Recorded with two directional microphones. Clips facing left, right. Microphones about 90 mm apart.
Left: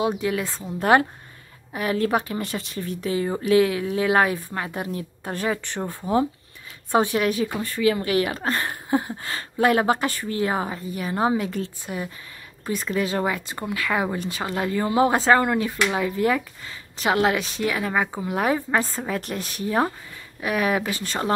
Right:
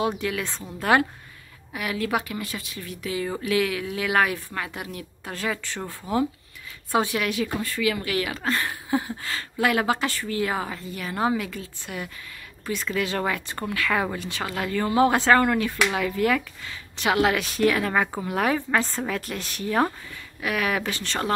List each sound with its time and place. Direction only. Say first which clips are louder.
0.0 s speech: left 2 dB; 20° left (ahead or behind)
5.3 s speech: left 3 dB; 20° left (ahead or behind)
18.8 s a woman's voice: left 1 dB; 5° left (ahead or behind)
19.0 s speech: left 2 dB; 25° left (ahead or behind)
20.8 s speech: left 1 dB; 15° left (ahead or behind)